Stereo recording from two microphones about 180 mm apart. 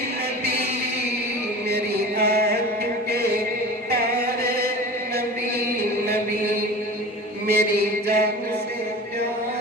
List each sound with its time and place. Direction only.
1.7 s chant: 60° right (ahead or behind)
3.9 s music: 60° right (ahead or behind)
7.4 s chant: 60° right (ahead or behind)